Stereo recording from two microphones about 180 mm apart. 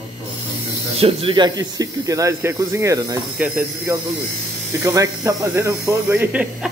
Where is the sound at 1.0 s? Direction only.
30° right (ahead or behind).